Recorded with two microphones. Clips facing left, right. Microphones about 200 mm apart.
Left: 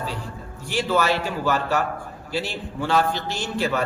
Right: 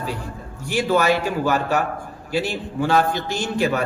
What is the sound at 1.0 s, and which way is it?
A man's voice, 15° right (ahead or behind).